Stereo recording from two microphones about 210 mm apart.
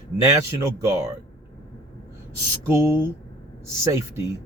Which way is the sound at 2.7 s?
10° right (ahead or behind).